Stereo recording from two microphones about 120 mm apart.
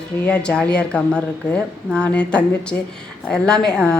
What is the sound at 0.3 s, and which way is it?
Speech, 10° left (ahead or behind).